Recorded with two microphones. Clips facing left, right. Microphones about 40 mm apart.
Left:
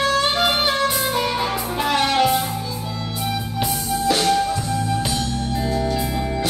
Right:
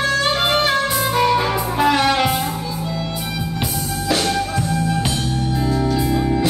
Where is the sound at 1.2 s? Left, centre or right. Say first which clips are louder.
Right 5 dB; centre.